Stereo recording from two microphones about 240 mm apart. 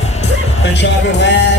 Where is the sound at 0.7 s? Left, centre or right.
Left.